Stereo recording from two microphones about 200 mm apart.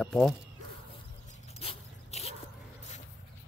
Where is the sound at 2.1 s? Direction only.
30° left (ahead or behind).